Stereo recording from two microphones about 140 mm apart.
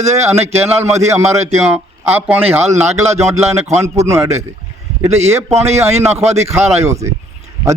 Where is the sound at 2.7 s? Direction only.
50° right (ahead or behind).